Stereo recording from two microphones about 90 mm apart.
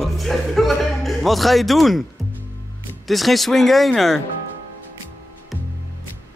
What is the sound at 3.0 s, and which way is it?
Speech, centre (ahead or behind).